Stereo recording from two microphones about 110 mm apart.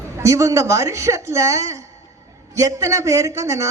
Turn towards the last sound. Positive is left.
turn(degrees=-30)  # may be behind; listen again after turning